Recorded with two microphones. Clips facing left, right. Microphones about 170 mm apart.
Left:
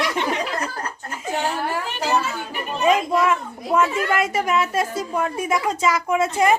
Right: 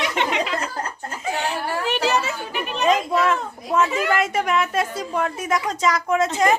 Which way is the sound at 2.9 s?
10° left (ahead or behind).